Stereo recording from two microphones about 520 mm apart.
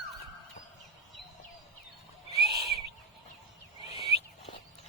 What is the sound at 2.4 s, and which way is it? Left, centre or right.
Owl, centre.